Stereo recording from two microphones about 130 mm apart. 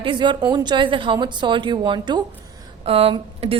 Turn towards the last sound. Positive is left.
turn(degrees=-50)  # may be behind; listen again after turning